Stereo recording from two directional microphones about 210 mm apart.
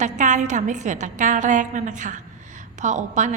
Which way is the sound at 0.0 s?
35° right (ahead or behind).